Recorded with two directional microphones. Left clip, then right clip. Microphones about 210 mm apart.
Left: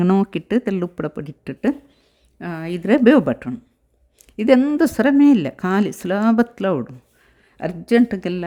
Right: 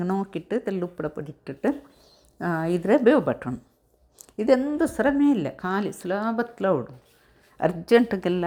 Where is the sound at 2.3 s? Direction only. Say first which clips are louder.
Right 2 dB; 10° left (ahead or behind).